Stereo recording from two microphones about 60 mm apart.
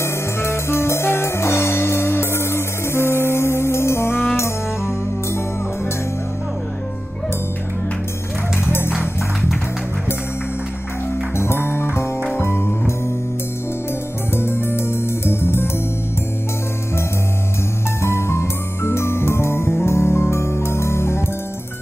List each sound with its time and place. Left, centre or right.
0.0 s music: left
8.6 s music: left
11.3 s music: left
14.3 s music: left
18.0 s music: left